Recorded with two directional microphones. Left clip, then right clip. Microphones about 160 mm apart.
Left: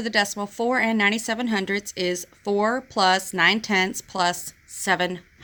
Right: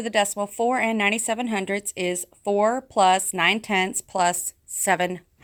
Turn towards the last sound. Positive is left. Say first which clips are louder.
# right 1 dB
turn(degrees=-40)  # may be behind; listen again after turning